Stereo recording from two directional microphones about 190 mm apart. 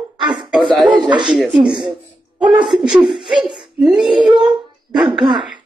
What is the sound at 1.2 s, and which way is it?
Speech, 5° right (ahead or behind).